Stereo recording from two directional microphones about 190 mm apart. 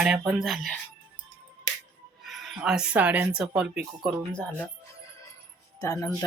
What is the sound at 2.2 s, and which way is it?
Speech, centre (ahead or behind).